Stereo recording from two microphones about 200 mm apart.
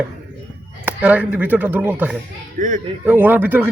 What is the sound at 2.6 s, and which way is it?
Speech, 40° right (ahead or behind).